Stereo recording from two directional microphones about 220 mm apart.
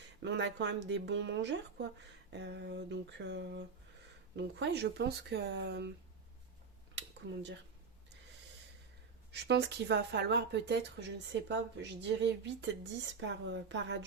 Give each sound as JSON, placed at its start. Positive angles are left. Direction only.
{"t": 0.2, "sound": "speech", "side_deg": -55}
{"t": 9.3, "sound": "speech", "side_deg": -50}